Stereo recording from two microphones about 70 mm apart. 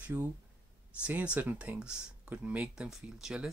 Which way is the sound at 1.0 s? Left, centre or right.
Centre.